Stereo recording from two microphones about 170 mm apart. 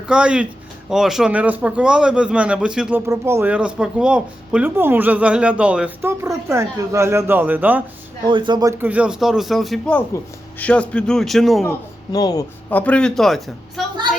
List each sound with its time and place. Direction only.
0.1 s a man's voice: 5° right (ahead or behind)
3.1 s speech: 15° right (ahead or behind)
8.3 s a man's voice: 30° right (ahead or behind)
8.8 s a man's voice: 10° right (ahead or behind)
12.1 s speech: 20° left (ahead or behind)
12.7 s a man's voice: 10° left (ahead or behind)